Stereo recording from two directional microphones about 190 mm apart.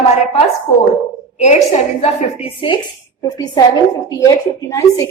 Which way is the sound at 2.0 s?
35° left (ahead or behind).